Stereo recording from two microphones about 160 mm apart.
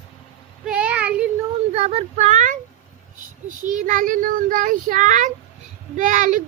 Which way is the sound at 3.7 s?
50° right (ahead or behind).